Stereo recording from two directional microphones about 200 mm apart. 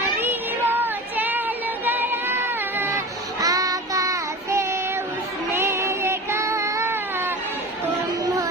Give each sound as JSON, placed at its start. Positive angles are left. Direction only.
{"t": 0.2, "sound": "child singing", "side_deg": -10}
{"t": 1.8, "sound": "a sound", "side_deg": -10}
{"t": 3.4, "sound": "child singing", "side_deg": -15}